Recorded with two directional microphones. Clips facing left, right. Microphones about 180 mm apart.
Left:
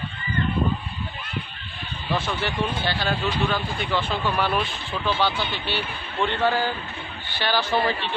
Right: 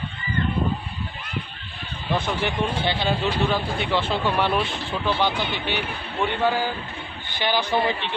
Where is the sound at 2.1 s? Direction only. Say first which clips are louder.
Right 2 dB; 20° right (ahead or behind).